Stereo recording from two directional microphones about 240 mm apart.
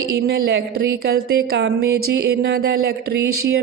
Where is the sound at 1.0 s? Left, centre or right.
Right.